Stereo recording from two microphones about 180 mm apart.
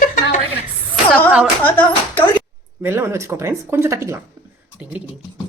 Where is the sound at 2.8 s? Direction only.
15° right (ahead or behind).